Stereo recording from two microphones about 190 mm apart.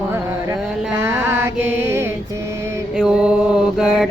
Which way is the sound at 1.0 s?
10° right (ahead or behind).